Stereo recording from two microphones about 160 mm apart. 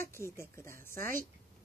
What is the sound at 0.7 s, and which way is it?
Speech, 60° right (ahead or behind).